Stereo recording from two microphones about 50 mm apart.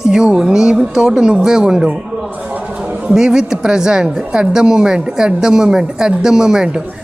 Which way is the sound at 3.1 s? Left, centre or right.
Centre.